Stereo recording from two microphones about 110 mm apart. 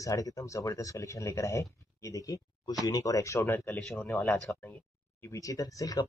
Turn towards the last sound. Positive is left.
turn(degrees=30)  # may be behind; listen again after turning